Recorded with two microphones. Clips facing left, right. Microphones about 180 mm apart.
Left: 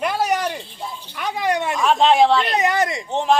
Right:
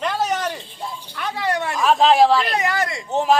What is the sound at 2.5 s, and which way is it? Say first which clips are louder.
Speech: left 3 dB; 20° left (ahead or behind).